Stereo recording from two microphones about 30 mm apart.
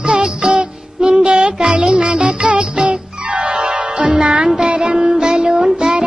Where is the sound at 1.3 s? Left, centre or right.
Right.